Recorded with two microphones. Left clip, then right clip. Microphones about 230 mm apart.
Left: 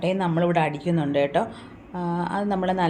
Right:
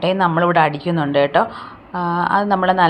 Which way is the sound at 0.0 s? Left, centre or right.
Centre.